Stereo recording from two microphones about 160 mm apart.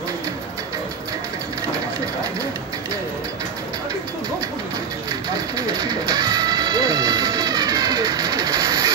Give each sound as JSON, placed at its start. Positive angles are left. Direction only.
{"t": 5.3, "sound": "music", "side_deg": -25}